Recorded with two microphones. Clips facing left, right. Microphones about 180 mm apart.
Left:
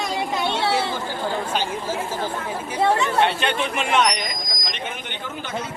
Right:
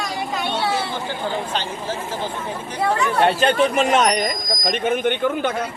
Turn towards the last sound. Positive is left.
turn(degrees=-55)  # may be behind; listen again after turning